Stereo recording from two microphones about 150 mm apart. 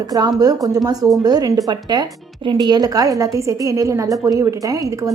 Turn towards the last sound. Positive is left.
turn(degrees=-25)  # may be behind; listen again after turning